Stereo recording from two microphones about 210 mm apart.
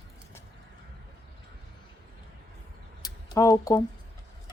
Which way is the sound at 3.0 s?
20° left (ahead or behind).